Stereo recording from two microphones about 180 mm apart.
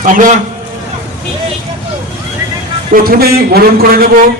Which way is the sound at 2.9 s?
55° right (ahead or behind).